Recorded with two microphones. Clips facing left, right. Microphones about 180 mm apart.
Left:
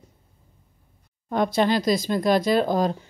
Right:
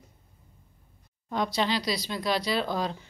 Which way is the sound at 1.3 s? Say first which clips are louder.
Left 7 dB; 50° left (ahead or behind).